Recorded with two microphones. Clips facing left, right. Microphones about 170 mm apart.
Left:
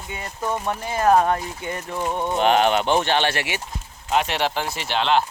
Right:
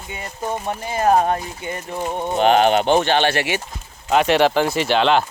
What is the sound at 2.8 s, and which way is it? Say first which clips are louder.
Speech: right 4 dB; 20° right (ahead or behind).